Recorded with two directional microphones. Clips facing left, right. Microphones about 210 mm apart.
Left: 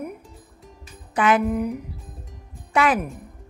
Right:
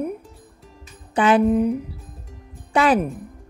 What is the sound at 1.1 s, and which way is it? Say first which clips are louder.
Speech: right 4 dB; 30° right (ahead or behind).